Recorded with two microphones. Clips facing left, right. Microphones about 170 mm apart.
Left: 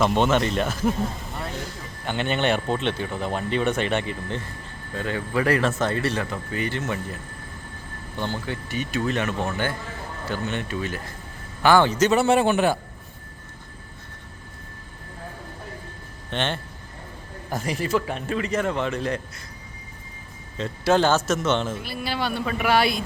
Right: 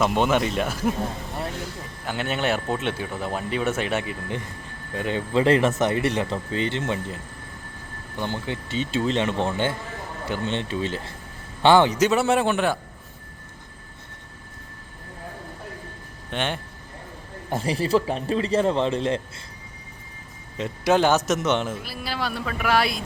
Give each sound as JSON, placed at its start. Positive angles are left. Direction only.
{"t": 0.0, "sound": "speech", "side_deg": -5}
{"t": 2.0, "sound": "speech", "side_deg": -5}
{"t": 4.9, "sound": "speech", "side_deg": -20}
{"t": 16.3, "sound": "a man's voice", "side_deg": -10}
{"t": 17.5, "sound": "speech", "side_deg": -30}
{"t": 20.6, "sound": "speech", "side_deg": -15}
{"t": 21.8, "sound": "speech", "side_deg": 0}